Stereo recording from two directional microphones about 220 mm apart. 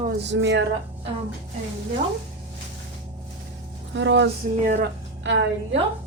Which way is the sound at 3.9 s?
55° right (ahead or behind).